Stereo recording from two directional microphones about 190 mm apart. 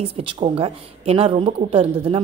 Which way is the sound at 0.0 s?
30° right (ahead or behind).